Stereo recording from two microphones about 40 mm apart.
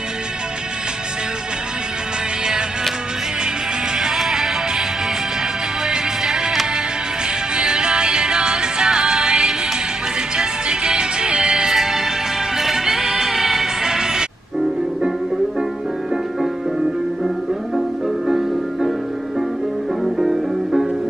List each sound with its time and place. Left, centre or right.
4.0 s music: centre
5.9 s music: centre
7.5 s music: right
11.7 s music: centre
20.2 s music: centre